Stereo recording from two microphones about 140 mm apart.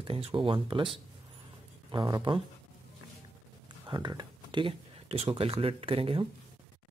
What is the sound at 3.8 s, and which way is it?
Speech, 30° right (ahead or behind).